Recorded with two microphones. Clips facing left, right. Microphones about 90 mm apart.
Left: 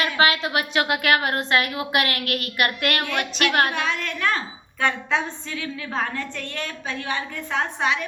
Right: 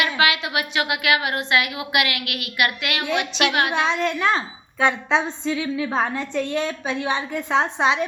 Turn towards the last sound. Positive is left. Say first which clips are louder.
# right 4 dB
turn(degrees=-25)  # may be behind; listen again after turning